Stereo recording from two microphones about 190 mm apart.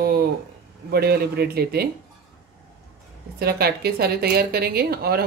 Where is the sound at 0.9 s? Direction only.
55° right (ahead or behind).